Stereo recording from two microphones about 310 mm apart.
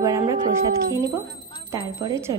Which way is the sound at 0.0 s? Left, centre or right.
Centre.